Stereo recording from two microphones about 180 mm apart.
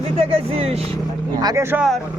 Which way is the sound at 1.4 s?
20° right (ahead or behind).